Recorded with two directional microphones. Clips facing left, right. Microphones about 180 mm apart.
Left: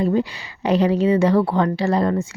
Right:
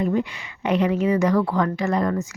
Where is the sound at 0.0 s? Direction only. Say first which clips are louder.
Left 3 dB; 35° left (ahead or behind).